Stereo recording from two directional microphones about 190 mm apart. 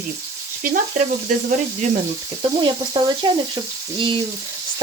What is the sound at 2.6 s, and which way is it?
Frying, 25° right (ahead or behind).